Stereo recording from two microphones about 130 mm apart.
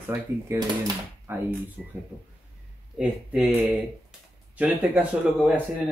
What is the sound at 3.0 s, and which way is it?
Speech, 5° right (ahead or behind).